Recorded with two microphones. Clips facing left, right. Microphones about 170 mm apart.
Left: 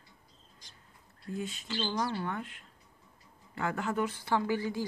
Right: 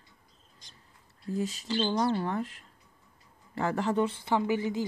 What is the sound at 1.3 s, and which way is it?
Speech, 40° right (ahead or behind).